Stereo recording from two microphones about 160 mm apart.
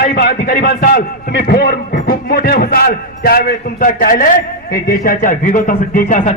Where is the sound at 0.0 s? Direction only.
80° left.